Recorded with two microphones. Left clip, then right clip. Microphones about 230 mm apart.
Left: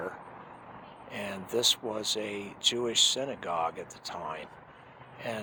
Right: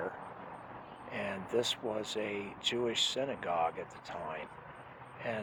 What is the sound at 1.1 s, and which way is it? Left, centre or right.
Speech, left.